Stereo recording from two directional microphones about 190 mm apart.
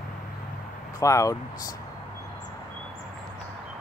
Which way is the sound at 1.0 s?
15° left (ahead or behind).